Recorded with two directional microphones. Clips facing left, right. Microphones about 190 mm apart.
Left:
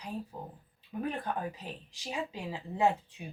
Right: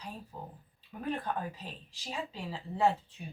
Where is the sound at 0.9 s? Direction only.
15° left (ahead or behind).